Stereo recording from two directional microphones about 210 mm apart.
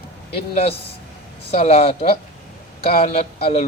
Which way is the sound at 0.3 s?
30° left (ahead or behind).